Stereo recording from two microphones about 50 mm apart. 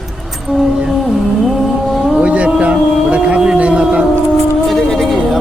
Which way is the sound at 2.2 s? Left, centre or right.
Right.